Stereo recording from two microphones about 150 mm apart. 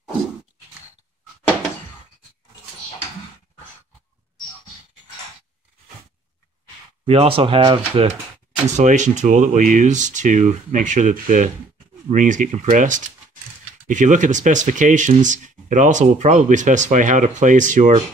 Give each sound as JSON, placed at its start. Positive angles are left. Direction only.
{"t": 7.1, "sound": "speech", "side_deg": -40}
{"t": 8.7, "sound": "speech", "side_deg": -55}